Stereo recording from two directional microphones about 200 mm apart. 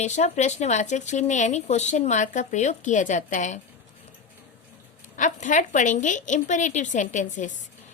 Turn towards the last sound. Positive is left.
turn(degrees=40)  # may be behind; listen again after turning